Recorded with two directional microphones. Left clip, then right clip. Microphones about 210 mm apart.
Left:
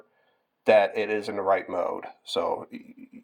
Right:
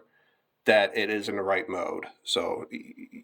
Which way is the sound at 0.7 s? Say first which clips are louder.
Left 2 dB; 15° right (ahead or behind).